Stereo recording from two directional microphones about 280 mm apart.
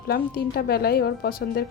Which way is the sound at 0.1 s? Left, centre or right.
Left.